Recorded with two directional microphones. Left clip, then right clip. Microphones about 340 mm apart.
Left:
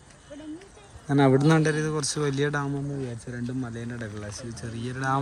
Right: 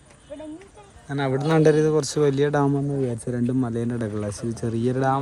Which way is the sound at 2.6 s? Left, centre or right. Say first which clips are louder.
Right 9 dB; right.